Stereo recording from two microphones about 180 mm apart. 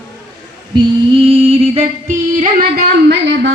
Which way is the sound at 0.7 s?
30° right (ahead or behind).